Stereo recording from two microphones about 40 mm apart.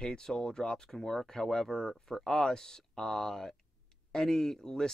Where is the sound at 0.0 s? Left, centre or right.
Centre.